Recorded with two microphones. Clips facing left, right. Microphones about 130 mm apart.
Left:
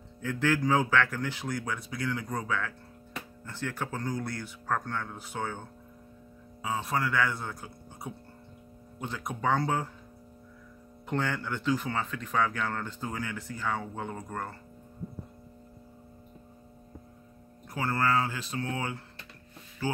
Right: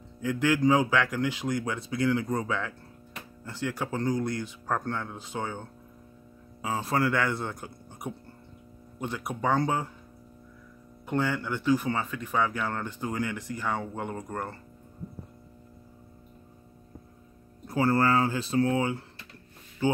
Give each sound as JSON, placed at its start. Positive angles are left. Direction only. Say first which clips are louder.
{"t": 0.2, "sound": "speech", "louder": "right 3 dB", "side_deg": -15}
{"t": 6.8, "sound": "speech", "louder": "right 3 dB", "side_deg": -30}
{"t": 9.0, "sound": "speech", "louder": "right 2 dB", "side_deg": -5}
{"t": 11.1, "sound": "speech", "louder": "right 3 dB", "side_deg": -5}
{"t": 17.6, "sound": "speech", "louder": "right 5 dB", "side_deg": -35}